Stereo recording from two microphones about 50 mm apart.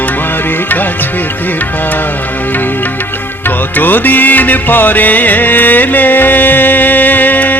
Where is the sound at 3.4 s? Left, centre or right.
Left.